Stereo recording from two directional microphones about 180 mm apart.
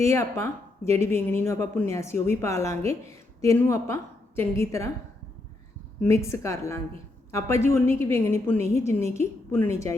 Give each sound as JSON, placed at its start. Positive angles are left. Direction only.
{"t": 0.0, "sound": "a woman's voice", "side_deg": 15}
{"t": 6.0, "sound": "a woman's voice", "side_deg": 15}